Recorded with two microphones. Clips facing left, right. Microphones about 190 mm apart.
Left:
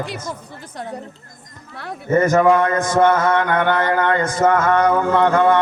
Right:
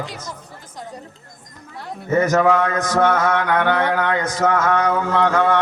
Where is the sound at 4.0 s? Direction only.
55° left (ahead or behind).